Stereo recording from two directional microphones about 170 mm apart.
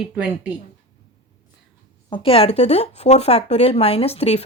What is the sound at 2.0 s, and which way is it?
Speech, 30° left (ahead or behind).